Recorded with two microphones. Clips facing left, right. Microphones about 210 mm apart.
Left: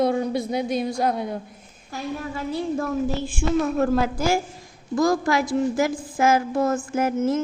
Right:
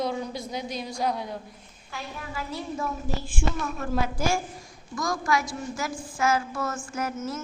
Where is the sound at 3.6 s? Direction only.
40° left (ahead or behind).